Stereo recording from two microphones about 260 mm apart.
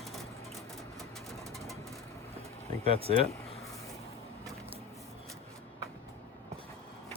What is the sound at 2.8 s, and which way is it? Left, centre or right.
Speech, right.